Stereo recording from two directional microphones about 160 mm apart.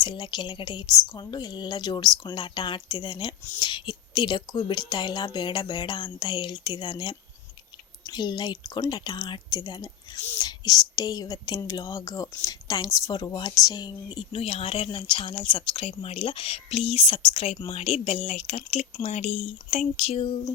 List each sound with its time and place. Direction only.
0.0 s speech: 30° left (ahead or behind)